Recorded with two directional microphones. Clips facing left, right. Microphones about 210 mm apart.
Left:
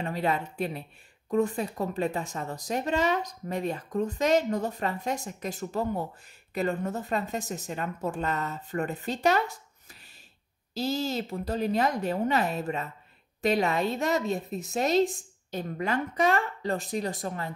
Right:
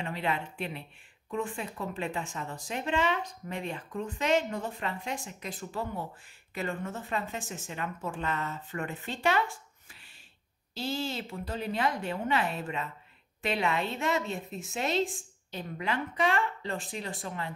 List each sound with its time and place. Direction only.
0.0 s a woman's voice: 40° left (ahead or behind)